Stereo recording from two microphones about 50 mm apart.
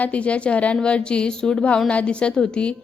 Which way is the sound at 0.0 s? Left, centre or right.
Left.